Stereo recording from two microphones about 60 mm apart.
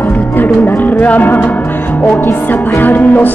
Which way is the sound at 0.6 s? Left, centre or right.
Left.